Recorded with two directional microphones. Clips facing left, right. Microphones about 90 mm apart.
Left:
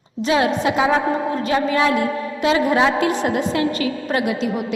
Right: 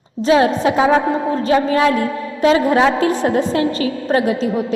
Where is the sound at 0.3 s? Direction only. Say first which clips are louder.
Right 4 dB; 35° right (ahead or behind).